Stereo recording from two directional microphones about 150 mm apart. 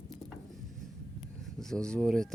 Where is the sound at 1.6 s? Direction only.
5° left (ahead or behind).